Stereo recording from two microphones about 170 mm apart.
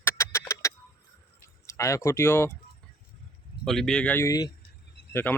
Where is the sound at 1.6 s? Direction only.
15° left (ahead or behind).